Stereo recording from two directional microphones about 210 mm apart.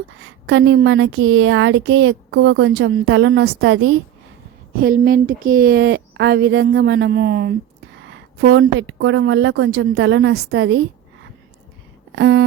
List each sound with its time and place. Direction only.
0.4 s speech: 65° right (ahead or behind)
4.8 s a woman's voice: 45° right (ahead or behind); by 10.8 s 65° right (ahead or behind)
12.1 s speech: 60° right (ahead or behind)